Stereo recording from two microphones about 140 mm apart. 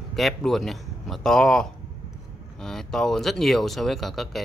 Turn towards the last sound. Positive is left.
turn(degrees=0)  # may be behind; listen again after turning